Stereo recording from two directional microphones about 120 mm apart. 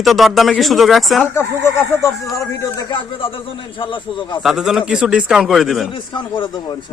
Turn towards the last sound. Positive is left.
turn(degrees=35)  # may be behind; listen again after turning